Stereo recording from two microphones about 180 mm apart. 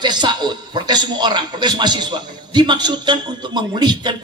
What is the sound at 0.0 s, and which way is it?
A man's voice, 25° right (ahead or behind).